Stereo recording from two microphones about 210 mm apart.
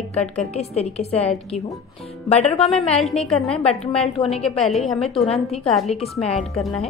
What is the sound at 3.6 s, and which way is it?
Speech, 25° left (ahead or behind).